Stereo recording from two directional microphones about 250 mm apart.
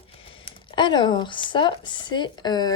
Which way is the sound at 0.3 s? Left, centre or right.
Centre.